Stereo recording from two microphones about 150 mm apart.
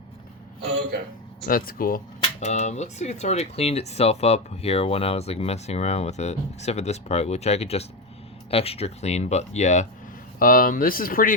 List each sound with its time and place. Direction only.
0.9 s a sound: 90° right
1.5 s speech: 70° left (ahead or behind)
2.2 s speech: 50° left (ahead or behind)
10.4 s speech: 70° left (ahead or behind)